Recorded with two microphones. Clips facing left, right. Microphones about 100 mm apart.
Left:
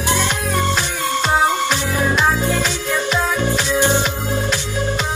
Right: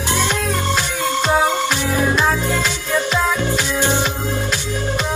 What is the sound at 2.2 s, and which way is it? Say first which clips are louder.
Music: left 1 dB; 15° left (ahead or behind).